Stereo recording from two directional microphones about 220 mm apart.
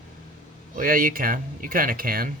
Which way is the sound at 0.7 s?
40° right (ahead or behind).